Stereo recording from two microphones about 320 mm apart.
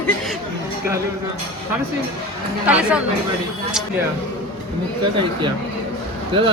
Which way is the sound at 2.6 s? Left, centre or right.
Centre.